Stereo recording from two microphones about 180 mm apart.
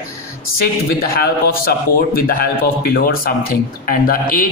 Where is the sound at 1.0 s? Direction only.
55° left (ahead or behind).